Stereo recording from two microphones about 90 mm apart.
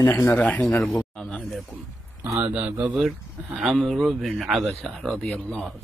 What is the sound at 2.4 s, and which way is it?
Speech, 15° right (ahead or behind).